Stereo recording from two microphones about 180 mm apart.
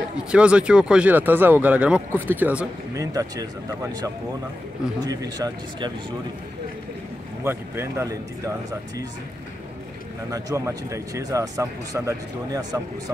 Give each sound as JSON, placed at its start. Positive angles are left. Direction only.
{"t": 0.3, "sound": "speech", "side_deg": -5}
{"t": 7.4, "sound": "speech", "side_deg": -15}
{"t": 10.3, "sound": "speech", "side_deg": -15}